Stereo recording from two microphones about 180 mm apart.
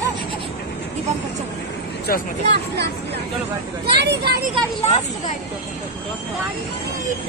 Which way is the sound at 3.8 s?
65° right (ahead or behind).